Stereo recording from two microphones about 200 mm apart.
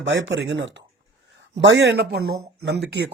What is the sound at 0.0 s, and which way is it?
A man's voice, 65° right (ahead or behind).